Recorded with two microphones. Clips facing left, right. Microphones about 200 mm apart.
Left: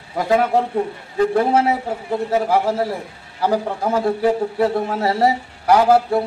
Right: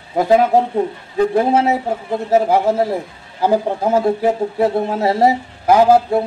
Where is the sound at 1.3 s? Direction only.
25° right (ahead or behind).